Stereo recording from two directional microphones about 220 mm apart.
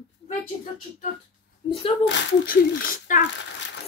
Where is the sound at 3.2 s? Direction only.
55° left (ahead or behind).